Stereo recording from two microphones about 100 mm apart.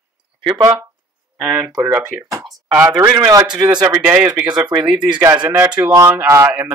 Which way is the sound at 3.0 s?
40° right (ahead or behind).